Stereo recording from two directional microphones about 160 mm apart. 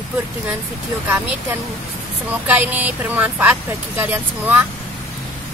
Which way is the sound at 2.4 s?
10° right (ahead or behind).